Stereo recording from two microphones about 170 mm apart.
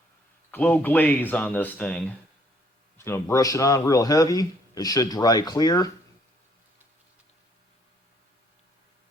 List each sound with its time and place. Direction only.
0.5 s a man's voice: 10° left (ahead or behind)